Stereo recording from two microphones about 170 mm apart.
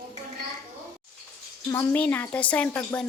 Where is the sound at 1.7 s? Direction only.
10° left (ahead or behind).